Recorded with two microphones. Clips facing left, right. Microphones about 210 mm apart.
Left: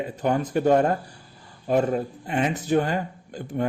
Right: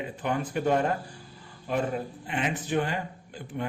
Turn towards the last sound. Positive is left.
turn(degrees=40)  # may be behind; listen again after turning